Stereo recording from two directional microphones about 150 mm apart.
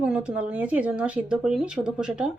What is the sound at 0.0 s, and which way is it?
Speech, 10° right (ahead or behind).